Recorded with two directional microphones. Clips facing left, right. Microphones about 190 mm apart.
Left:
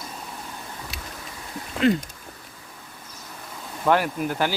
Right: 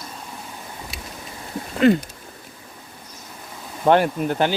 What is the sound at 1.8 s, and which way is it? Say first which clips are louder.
Speech: right 4 dB; 55° right (ahead or behind).